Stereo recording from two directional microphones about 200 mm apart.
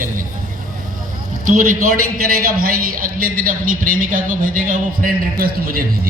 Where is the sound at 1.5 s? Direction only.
45° right (ahead or behind).